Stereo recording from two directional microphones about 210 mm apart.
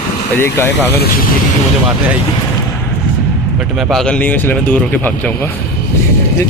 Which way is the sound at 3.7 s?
Centre (ahead or behind).